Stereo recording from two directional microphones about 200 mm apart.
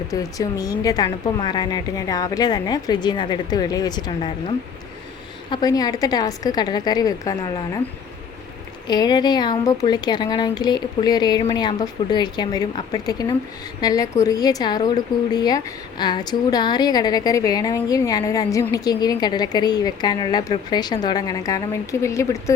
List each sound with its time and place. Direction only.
0.1 s a woman's voice: 15° left (ahead or behind)
8.9 s a woman's voice: 20° left (ahead or behind)